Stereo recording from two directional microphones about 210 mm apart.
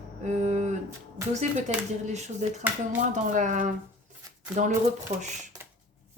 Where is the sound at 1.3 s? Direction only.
35° right (ahead or behind).